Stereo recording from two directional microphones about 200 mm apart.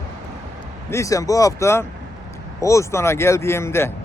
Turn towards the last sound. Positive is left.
turn(degrees=10)  # may be behind; listen again after turning